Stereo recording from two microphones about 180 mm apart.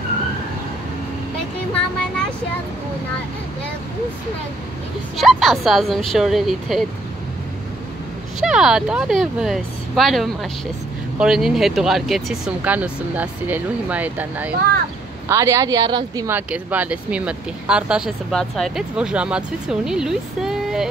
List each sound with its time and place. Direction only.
1.7 s speech: 5° left (ahead or behind)
5.1 s speech: centre (ahead or behind)
8.4 s speech: 5° right (ahead or behind); by 16.3 s 20° right (ahead or behind)
16.3 s speech: 10° right (ahead or behind)